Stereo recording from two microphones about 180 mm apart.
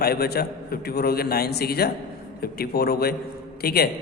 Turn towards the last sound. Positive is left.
turn(degrees=60)  # may be behind; listen again after turning